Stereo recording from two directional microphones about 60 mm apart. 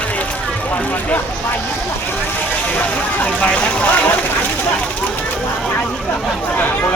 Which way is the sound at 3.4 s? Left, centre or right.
Left.